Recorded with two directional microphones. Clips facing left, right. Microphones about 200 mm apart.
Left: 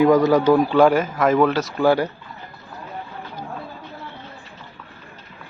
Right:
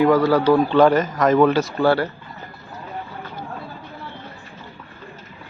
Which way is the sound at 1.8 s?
15° left (ahead or behind).